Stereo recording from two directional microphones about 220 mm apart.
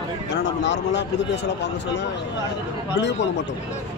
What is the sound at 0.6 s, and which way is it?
Speech, 55° left (ahead or behind).